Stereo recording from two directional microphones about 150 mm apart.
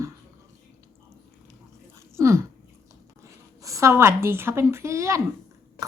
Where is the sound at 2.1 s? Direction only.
20° right (ahead or behind).